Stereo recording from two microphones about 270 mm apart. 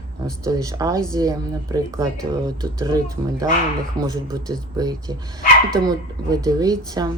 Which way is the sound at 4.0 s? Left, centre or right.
Centre.